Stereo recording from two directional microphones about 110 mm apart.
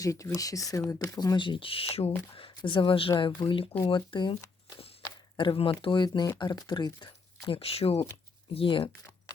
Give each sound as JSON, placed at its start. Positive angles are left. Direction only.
{"t": 0.0, "sound": "speech", "side_deg": 30}
{"t": 5.0, "sound": "a sound", "side_deg": 40}
{"t": 5.8, "sound": "speech", "side_deg": 45}
{"t": 8.5, "sound": "speech", "side_deg": 50}